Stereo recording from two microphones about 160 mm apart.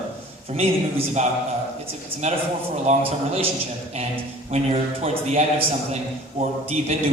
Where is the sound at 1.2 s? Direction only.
45° right (ahead or behind).